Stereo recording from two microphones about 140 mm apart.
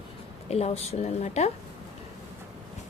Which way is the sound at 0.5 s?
50° left (ahead or behind).